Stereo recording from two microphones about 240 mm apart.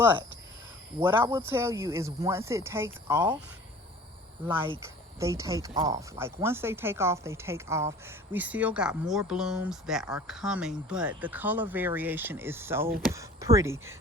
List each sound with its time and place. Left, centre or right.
1.0 s a woman's voice: centre
4.4 s a woman's voice: centre